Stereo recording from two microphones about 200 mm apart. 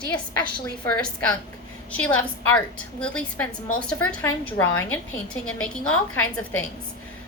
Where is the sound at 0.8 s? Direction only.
5° left (ahead or behind).